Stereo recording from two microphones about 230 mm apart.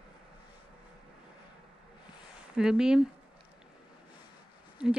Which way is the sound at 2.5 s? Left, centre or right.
Centre.